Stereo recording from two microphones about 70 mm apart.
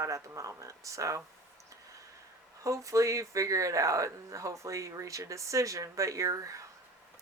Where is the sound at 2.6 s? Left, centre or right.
Right.